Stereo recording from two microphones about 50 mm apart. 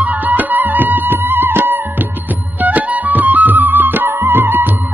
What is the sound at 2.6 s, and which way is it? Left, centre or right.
Music, right.